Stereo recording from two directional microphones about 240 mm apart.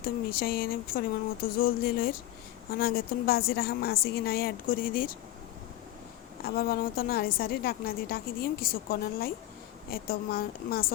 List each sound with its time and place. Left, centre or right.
0.0 s a woman's voice: left
6.4 s a woman's voice: left